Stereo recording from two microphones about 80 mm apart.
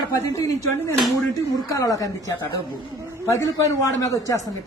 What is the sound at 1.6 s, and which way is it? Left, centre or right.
Speech, left.